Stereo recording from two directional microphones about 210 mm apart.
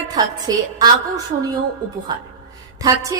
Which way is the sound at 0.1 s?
20° right (ahead or behind).